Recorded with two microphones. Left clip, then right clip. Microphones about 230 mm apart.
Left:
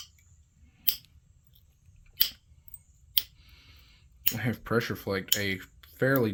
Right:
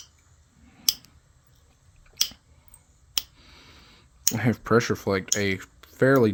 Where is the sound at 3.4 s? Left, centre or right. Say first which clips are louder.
Right 6 dB; right.